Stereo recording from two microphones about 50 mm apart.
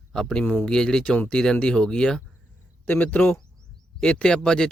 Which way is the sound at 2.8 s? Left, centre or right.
Left.